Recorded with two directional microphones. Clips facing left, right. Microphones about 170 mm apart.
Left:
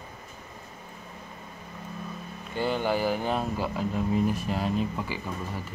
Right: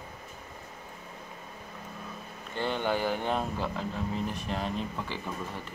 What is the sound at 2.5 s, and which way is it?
Speech, 5° left (ahead or behind).